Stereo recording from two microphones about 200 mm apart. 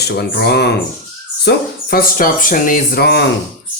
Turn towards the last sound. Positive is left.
turn(degrees=55)  # may be behind; listen again after turning